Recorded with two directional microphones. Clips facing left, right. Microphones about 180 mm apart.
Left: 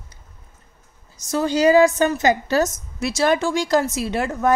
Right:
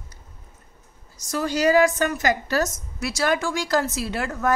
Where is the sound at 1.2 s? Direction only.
25° left (ahead or behind).